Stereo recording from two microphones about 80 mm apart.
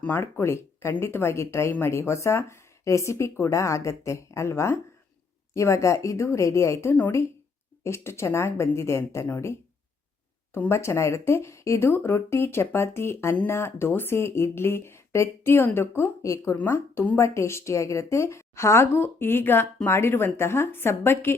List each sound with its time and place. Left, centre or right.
0.2 s a woman's voice: left
10.5 s a woman's voice: left